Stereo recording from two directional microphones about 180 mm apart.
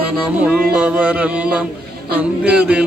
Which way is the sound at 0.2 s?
5° right (ahead or behind).